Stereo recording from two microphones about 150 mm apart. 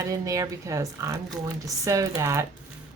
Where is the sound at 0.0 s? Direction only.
25° right (ahead or behind).